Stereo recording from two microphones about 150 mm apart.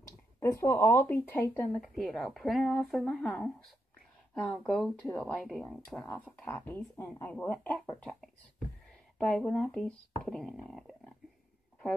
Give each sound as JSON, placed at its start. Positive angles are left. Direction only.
{"t": 0.0, "sound": "speech", "side_deg": 20}
{"t": 1.8, "sound": "speech", "side_deg": 0}